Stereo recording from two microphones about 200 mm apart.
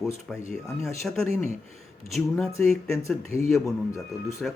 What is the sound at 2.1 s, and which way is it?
Speech, centre (ahead or behind).